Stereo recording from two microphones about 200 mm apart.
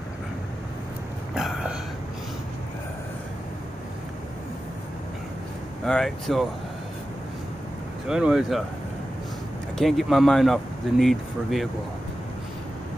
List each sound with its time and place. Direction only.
1.3 s a sound: 5° right (ahead or behind)
5.9 s speech: centre (ahead or behind)
8.1 s speech: 5° right (ahead or behind)
9.8 s speech: centre (ahead or behind)